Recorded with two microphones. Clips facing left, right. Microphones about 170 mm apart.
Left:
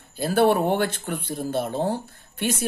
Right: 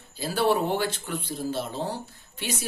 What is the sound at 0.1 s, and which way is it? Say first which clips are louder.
Speech: left 5 dB; 55° left (ahead or behind).